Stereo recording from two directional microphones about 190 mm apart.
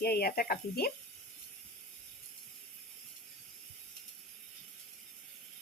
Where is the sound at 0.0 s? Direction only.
55° left (ahead or behind).